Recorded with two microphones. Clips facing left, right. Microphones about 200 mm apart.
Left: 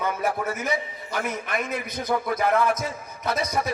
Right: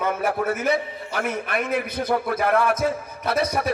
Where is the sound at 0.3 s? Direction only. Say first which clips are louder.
Right 6 dB; 60° right (ahead or behind).